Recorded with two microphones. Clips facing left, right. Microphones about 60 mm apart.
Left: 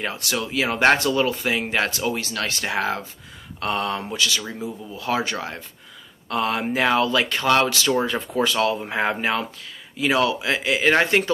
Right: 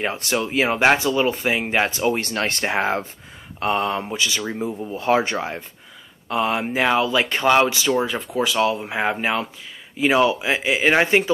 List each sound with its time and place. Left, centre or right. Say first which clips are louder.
0.0 s speech: right 3 dB; right
0.7 s speech: left 1 dB; centre
2.1 s speech: right 3 dB; right
4.6 s speech: right 5 dB; right
6.2 s speech: right 2 dB; centre
7.2 s speech: right 2 dB; right
7.9 s speech: right 1 dB; centre
9.9 s speech: right 3 dB; centre